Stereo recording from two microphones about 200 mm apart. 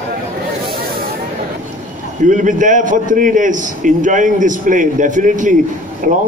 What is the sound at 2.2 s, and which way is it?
A man's voice, 40° right (ahead or behind).